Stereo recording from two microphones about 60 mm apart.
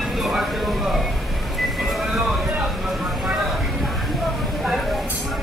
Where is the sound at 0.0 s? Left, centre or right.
Centre.